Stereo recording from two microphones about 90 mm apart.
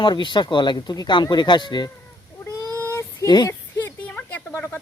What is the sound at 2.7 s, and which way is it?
Child singing, 25° left (ahead or behind).